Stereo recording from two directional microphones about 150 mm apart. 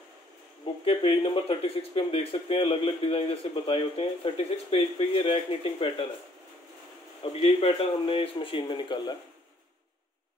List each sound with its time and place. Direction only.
0.8 s speech: 40° left (ahead or behind)
7.4 s speech: 40° left (ahead or behind)